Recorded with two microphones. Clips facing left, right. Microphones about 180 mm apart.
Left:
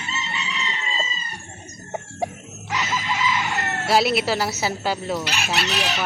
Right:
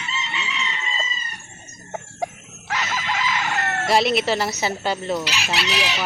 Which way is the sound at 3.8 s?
5° left (ahead or behind).